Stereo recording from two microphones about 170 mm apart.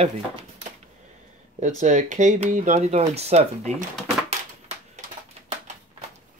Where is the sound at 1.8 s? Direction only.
45° right (ahead or behind).